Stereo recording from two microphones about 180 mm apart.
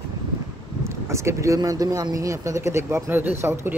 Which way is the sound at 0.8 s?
15° right (ahead or behind).